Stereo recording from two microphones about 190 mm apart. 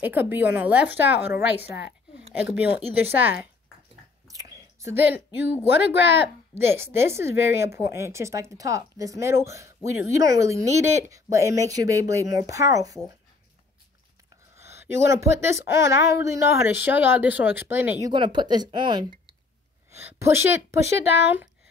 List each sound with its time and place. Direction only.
0.0 s a woman's voice: 10° right (ahead or behind)
4.3 s a sound: 20° right (ahead or behind)
6.1 s a woman's voice: 10° right (ahead or behind)
14.6 s a woman's voice: 15° right (ahead or behind)
18.0 s speech: 25° right (ahead or behind)
19.9 s a woman's voice: 15° right (ahead or behind)